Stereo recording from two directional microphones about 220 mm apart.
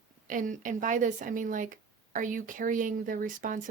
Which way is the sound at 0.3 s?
35° right (ahead or behind).